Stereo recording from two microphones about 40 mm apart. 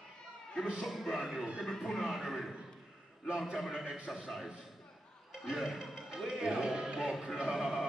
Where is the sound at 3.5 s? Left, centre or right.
Centre.